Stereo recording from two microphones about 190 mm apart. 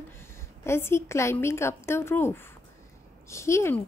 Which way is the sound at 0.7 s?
15° left (ahead or behind).